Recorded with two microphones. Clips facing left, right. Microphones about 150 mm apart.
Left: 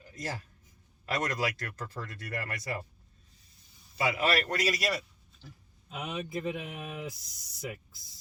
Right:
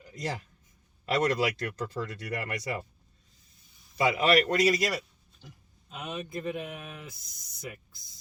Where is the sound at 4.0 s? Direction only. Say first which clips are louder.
Right 5 dB; 25° right (ahead or behind).